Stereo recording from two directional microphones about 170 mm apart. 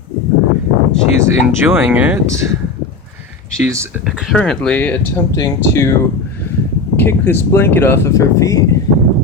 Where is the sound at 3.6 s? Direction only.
15° right (ahead or behind).